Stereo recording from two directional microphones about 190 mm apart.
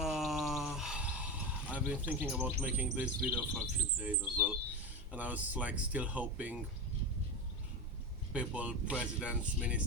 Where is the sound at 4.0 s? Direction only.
10° right (ahead or behind).